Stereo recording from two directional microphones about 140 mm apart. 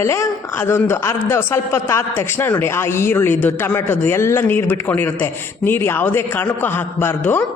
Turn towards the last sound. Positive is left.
turn(degrees=15)  # may be behind; listen again after turning